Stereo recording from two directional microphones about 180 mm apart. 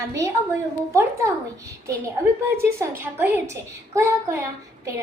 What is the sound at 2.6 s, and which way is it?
A woman's voice, 15° right (ahead or behind).